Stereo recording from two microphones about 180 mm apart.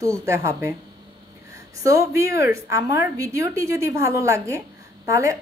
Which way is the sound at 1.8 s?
15° right (ahead or behind).